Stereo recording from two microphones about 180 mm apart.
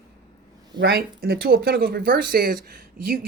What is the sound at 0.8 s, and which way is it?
A woman's voice, 60° right (ahead or behind).